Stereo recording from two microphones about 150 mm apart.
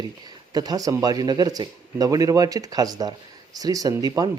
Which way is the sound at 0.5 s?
25° right (ahead or behind).